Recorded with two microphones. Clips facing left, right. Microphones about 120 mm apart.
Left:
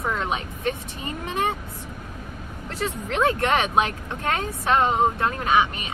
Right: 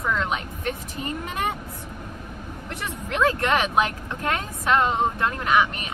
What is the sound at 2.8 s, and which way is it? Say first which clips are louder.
Speech: left 1 dB; 30° left (ahead or behind).